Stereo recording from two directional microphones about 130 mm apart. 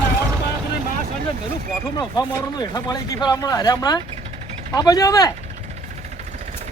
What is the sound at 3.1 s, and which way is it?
Speech, 30° left (ahead or behind).